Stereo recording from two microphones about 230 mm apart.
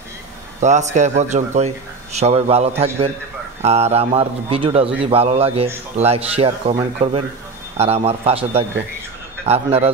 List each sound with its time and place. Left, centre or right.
0.6 s a man's voice: right